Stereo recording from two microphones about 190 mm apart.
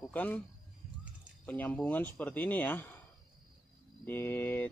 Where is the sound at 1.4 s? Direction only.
10° left (ahead or behind).